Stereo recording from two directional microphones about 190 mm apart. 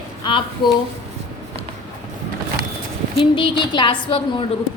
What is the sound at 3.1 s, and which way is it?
A woman's voice, 25° left (ahead or behind).